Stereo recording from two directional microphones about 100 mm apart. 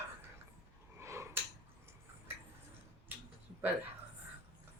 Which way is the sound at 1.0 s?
30° right (ahead or behind).